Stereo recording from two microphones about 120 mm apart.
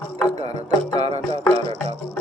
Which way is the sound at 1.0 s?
60° right (ahead or behind).